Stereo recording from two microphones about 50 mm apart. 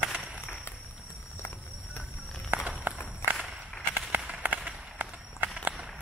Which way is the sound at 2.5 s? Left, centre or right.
Right.